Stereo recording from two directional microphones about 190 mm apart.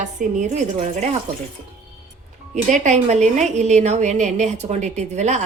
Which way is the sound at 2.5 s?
40° right (ahead or behind).